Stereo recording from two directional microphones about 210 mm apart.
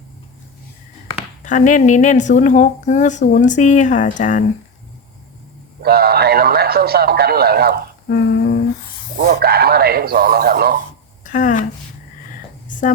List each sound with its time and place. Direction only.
1.5 s a woman's voice: 35° left (ahead or behind)
5.8 s a man's voice: 45° right (ahead or behind)
8.0 s humming: 45° left (ahead or behind)
9.1 s a man's voice: 45° right (ahead or behind)
11.2 s speech: 40° left (ahead or behind)